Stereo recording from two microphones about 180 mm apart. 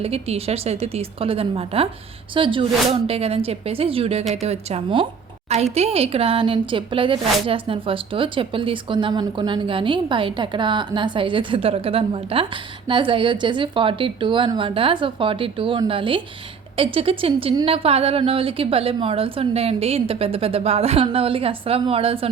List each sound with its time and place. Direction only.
0.0 s a woman's voice: 35° right (ahead or behind)